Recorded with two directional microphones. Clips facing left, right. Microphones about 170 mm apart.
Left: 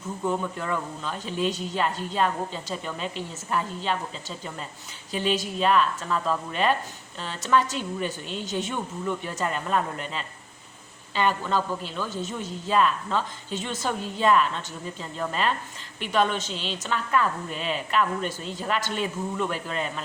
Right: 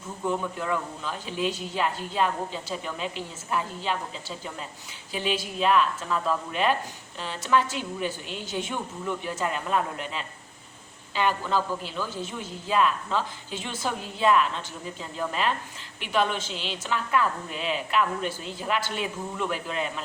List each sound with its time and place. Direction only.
0.6 s a woman's voice: 5° right (ahead or behind)